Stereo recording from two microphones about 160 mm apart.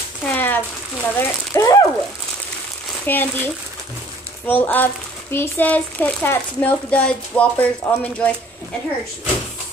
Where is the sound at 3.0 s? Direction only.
10° left (ahead or behind).